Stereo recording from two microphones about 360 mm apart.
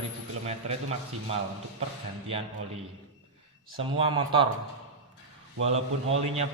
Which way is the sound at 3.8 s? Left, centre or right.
Centre.